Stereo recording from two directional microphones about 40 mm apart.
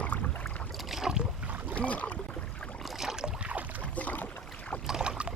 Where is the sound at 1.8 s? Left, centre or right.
Left.